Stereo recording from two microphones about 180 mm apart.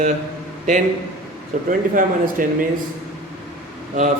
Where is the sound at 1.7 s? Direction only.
50° right (ahead or behind).